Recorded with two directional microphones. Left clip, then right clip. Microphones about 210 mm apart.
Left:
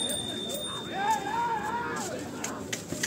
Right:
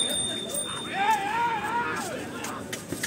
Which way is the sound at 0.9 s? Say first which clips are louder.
Right 4 dB; 20° left (ahead or behind).